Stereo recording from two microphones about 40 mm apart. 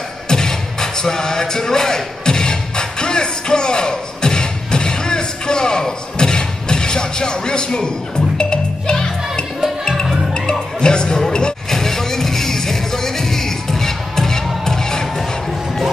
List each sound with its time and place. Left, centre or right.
0.3 s music: centre